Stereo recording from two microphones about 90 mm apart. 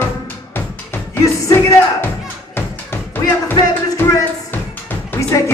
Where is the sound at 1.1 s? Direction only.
35° left (ahead or behind).